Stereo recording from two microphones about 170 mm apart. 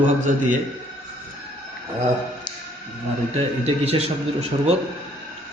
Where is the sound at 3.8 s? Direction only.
35° right (ahead or behind).